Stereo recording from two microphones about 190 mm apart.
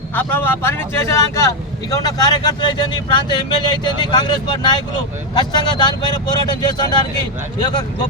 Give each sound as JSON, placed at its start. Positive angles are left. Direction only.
{"t": 0.1, "sound": "speech", "side_deg": 10}